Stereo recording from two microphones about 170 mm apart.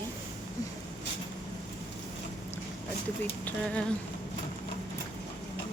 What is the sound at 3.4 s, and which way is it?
Speech, 5° left (ahead or behind).